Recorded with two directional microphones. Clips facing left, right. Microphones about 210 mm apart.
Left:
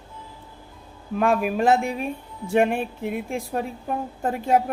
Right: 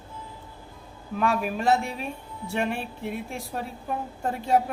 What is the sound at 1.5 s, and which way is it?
Speech, 50° left (ahead or behind).